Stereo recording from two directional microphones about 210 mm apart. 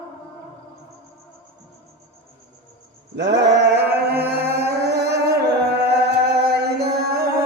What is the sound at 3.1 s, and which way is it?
Chant, 55° right (ahead or behind).